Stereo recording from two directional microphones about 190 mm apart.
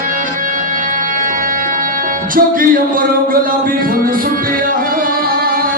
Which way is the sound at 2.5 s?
50° right (ahead or behind).